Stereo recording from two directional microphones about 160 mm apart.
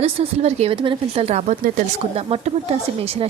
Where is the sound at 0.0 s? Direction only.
40° right (ahead or behind).